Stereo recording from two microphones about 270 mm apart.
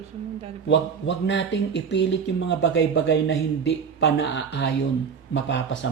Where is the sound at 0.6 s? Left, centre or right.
Left.